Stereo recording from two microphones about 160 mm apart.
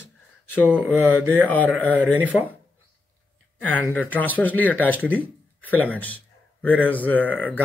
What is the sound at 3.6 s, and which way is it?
A man's voice, 10° left (ahead or behind).